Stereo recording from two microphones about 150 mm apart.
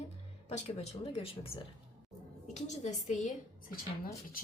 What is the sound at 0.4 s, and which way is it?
Speech, 45° left (ahead or behind).